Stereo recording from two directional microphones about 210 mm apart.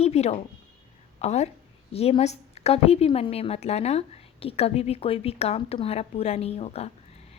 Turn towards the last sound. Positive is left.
turn(degrees=30)  # may be behind; listen again after turning